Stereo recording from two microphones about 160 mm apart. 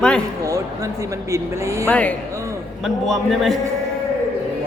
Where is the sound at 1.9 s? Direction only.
10° left (ahead or behind).